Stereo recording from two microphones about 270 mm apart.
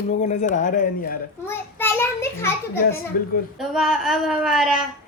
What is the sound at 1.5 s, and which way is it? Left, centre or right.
A child's voice, centre.